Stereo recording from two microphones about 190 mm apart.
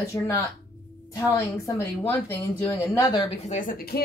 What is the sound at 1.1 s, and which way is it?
A woman's voice, 15° left (ahead or behind).